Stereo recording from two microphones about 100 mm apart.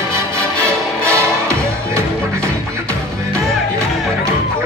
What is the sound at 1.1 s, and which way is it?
Music, 30° right (ahead or behind).